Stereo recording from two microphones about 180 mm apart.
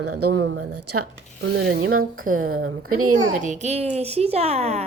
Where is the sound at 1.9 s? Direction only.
50° right (ahead or behind).